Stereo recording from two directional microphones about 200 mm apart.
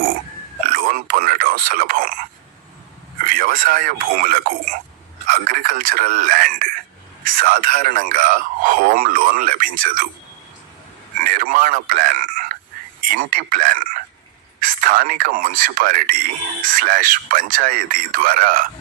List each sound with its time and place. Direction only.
0.7 s a sound: 45° right (ahead or behind)
3.2 s speech: 45° right (ahead or behind)
11.2 s speech: 45° right (ahead or behind)